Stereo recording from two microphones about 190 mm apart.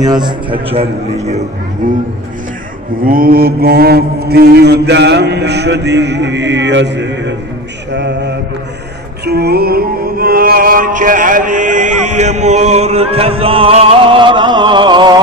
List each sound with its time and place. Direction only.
0.0 s a man's voice: 20° right (ahead or behind)
3.0 s mantra: 50° right (ahead or behind); by 8.4 s 65° right (ahead or behind)
9.2 s music: 55° right (ahead or behind); by 15.1 s 25° right (ahead or behind)